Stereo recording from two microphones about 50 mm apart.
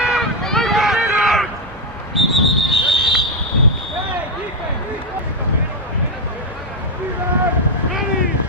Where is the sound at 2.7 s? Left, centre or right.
Centre.